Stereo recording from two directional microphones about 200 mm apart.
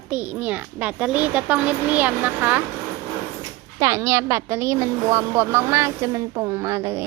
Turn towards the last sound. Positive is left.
turn(degrees=-15)  # may be behind; listen again after turning